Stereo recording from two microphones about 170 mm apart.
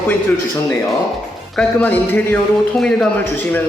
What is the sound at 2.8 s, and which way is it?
Music, 5° left (ahead or behind).